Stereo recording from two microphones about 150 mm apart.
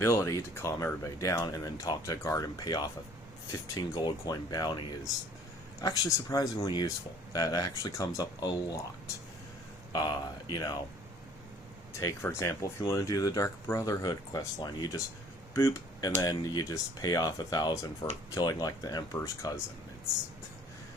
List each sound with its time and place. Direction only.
0.0 s speech: 20° left (ahead or behind)
9.9 s speech: 30° left (ahead or behind)
11.9 s speech: 20° left (ahead or behind)